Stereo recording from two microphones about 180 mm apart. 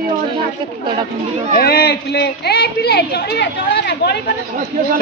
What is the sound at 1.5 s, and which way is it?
Speech, 55° left (ahead or behind).